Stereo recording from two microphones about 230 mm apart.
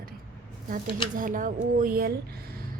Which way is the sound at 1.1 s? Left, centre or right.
Right.